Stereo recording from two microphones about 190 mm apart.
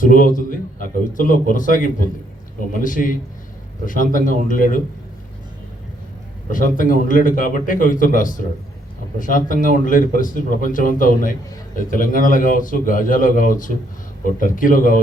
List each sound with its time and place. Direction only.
0.0 s speech: 45° left (ahead or behind)
6.5 s speech: 45° left (ahead or behind)